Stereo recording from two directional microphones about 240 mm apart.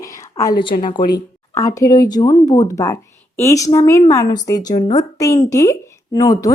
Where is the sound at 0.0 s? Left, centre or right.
Centre.